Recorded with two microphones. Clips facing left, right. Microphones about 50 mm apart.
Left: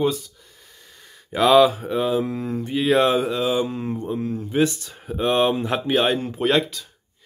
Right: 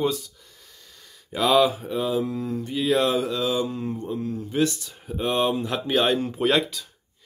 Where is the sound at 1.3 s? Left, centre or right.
Left.